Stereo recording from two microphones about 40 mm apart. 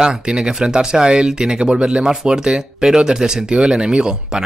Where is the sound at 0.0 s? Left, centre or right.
Centre.